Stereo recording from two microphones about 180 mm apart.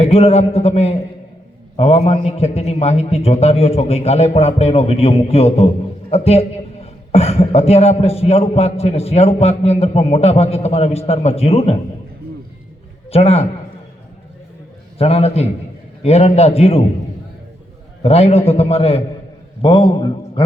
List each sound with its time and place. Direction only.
0.0 s a man's voice: 35° left (ahead or behind)
13.1 s a man's voice: 35° left (ahead or behind)
14.9 s a man's voice: 35° left (ahead or behind)
18.0 s a man's voice: 35° left (ahead or behind)